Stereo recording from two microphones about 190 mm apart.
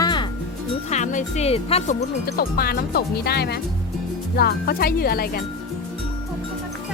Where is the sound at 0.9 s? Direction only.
40° left (ahead or behind).